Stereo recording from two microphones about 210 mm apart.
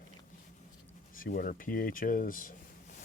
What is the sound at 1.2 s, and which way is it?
Speech, 40° left (ahead or behind).